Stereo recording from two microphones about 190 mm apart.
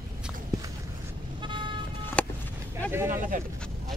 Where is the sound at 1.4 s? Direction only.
25° right (ahead or behind).